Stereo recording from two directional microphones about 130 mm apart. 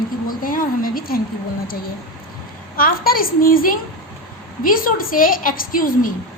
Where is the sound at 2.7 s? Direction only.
90° left.